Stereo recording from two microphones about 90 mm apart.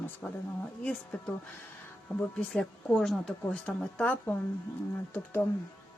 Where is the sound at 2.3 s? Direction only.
10° left (ahead or behind).